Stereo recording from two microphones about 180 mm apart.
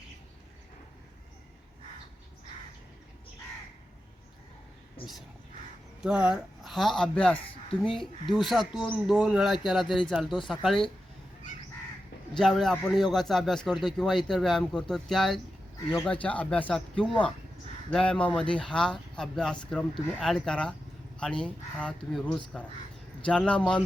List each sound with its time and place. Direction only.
6.0 s speech: 5° right (ahead or behind)
7.3 s a sound: 30° left (ahead or behind)
7.8 s speech: centre (ahead or behind)
12.3 s speech: centre (ahead or behind)